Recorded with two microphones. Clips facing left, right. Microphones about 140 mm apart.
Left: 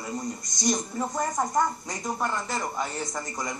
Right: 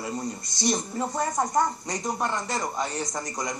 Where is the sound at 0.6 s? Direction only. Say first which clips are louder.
Right 1 dB; 30° right (ahead or behind).